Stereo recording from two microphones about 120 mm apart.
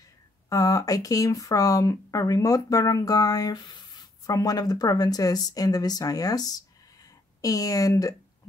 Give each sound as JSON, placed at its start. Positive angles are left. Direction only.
{"t": 0.5, "sound": "speech", "side_deg": 30}